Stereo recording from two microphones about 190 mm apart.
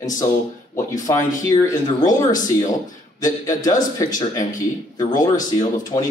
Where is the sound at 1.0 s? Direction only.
15° left (ahead or behind).